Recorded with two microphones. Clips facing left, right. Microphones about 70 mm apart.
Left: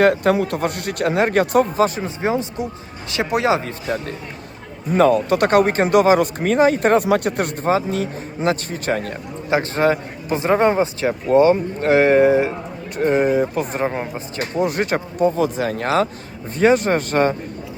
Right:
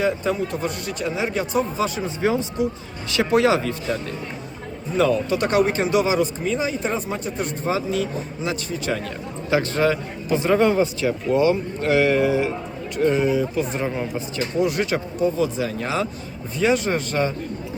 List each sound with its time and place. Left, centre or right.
0.0 s speech: left
2.0 s speech: left
4.9 s speech: left
7.6 s speech: left
9.5 s speech: left